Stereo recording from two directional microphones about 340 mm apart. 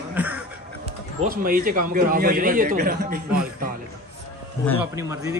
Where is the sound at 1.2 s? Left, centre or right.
Right.